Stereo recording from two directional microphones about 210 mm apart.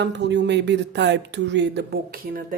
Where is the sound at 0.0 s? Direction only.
55° right (ahead or behind).